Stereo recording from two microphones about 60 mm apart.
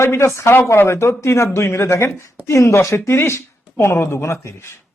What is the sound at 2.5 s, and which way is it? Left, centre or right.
A man's voice, left.